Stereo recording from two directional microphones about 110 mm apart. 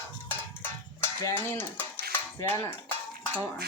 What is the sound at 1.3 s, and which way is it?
Cutlery, 20° left (ahead or behind).